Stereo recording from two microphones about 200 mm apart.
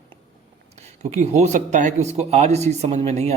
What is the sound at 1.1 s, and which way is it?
Speech, 35° right (ahead or behind).